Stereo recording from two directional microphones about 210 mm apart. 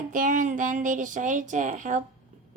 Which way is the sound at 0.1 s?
40° right (ahead or behind).